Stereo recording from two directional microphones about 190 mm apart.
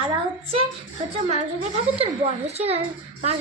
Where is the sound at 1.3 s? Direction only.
35° right (ahead or behind).